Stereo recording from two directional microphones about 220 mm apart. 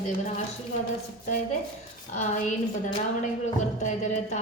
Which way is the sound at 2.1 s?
35° left (ahead or behind).